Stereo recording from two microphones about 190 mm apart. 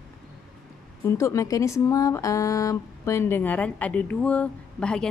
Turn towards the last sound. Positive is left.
turn(degrees=5)  # may be behind; listen again after turning